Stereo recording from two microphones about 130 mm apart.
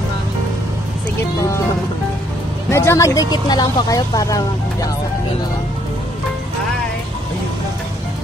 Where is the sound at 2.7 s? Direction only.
20° left (ahead or behind).